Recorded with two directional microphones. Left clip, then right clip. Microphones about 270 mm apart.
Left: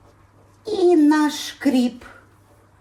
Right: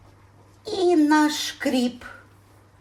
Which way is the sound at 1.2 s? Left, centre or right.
Right.